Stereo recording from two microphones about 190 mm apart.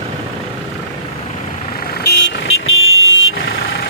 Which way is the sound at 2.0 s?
70° left (ahead or behind).